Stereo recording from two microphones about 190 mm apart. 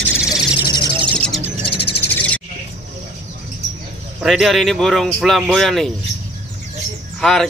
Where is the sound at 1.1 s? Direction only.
5° left (ahead or behind).